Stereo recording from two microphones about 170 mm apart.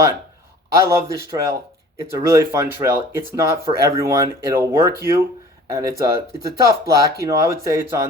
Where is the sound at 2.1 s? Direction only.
20° right (ahead or behind).